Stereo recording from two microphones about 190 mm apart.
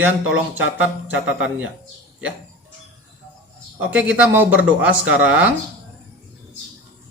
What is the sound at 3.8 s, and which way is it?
Speech, 5° right (ahead or behind).